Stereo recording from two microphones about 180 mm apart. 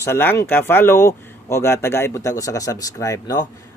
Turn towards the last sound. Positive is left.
turn(degrees=20)  # may be behind; listen again after turning